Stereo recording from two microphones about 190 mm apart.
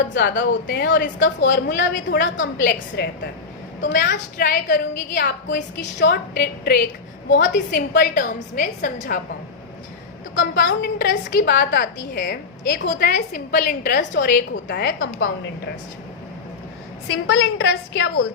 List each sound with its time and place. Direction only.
0.1 s a woman's voice: 70° left (ahead or behind)
3.0 s a woman's voice: 60° left (ahead or behind)
7.3 s a woman's voice: 70° left (ahead or behind); by 9.2 s 45° left (ahead or behind)
10.3 s a woman's voice: 65° left (ahead or behind)
17.1 s a woman's voice: 60° left (ahead or behind)